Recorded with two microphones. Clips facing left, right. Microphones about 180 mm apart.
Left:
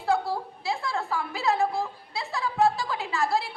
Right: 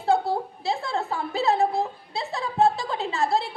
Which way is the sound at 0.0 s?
25° right (ahead or behind).